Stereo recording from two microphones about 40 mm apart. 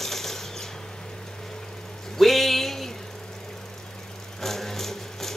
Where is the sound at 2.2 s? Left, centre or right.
Centre.